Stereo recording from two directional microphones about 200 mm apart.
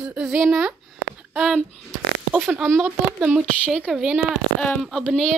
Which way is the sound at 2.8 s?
5° right (ahead or behind).